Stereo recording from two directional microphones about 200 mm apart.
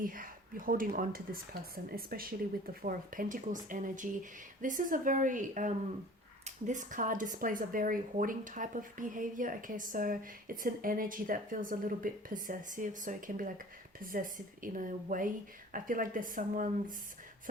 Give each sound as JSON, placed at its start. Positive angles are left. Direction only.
{"t": 0.0, "sound": "speech", "side_deg": -45}